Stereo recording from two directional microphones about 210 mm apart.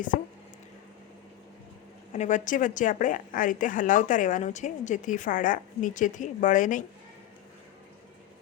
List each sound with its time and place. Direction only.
2.1 s a woman's voice: 35° left (ahead or behind)